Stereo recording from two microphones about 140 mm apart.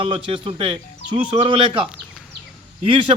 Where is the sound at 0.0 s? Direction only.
40° right (ahead or behind).